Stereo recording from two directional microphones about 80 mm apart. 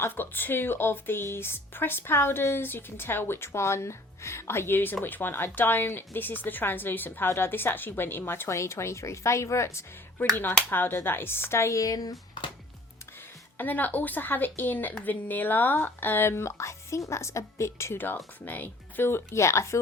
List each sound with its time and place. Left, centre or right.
0.2 s a woman's voice: left
13.6 s a woman's voice: left